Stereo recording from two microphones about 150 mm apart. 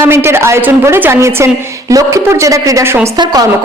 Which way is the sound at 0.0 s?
15° right (ahead or behind).